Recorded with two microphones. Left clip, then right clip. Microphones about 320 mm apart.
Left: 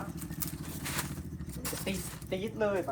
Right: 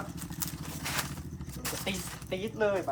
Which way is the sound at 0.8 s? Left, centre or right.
Centre.